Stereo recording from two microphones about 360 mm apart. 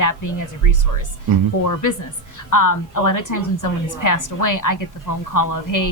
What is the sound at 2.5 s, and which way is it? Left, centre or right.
A woman's voice, left.